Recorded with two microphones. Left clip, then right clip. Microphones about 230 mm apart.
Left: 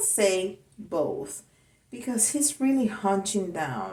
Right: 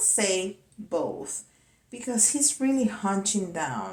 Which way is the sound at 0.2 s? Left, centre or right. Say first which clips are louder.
Left 8 dB; centre.